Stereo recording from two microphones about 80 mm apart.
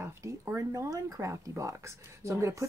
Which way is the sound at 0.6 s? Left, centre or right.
Right.